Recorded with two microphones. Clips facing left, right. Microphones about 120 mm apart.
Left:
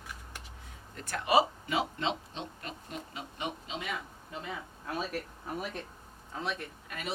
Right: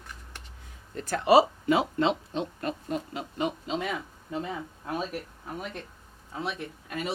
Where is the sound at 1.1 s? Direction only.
30° right (ahead or behind).